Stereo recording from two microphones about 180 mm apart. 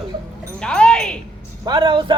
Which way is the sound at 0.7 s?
5° left (ahead or behind).